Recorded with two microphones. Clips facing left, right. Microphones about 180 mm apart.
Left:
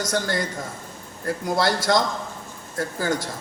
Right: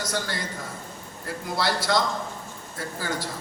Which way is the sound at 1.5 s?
45° left (ahead or behind).